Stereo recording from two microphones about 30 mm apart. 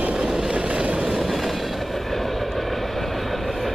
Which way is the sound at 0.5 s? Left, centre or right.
Right.